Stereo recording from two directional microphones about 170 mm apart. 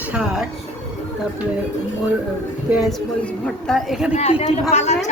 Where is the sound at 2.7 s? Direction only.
Centre (ahead or behind).